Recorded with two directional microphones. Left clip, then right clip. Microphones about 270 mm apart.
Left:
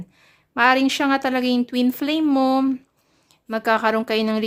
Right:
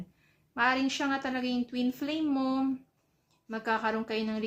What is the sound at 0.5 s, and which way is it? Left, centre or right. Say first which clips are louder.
Speech: left 11 dB; left.